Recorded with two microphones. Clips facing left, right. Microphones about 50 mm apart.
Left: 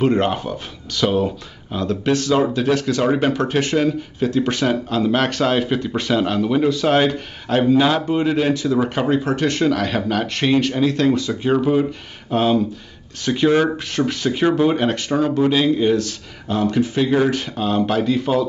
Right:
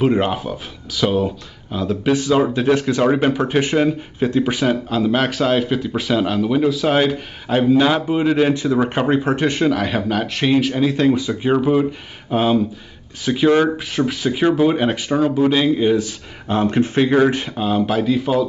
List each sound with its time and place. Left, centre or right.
0.0 s speech: centre
8.5 s speech: right
16.4 s speech: right; by 18.5 s centre